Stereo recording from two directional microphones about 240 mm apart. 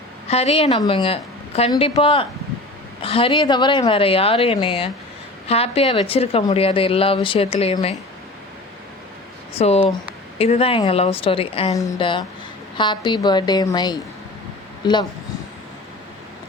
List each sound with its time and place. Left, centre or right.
0.3 s a woman's voice: left
9.6 s a woman's voice: left